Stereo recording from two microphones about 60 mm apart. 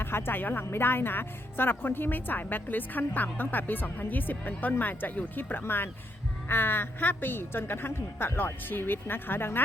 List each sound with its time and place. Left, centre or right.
0.0 s a woman's voice: left